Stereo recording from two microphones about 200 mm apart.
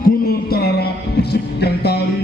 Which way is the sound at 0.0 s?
50° left (ahead or behind).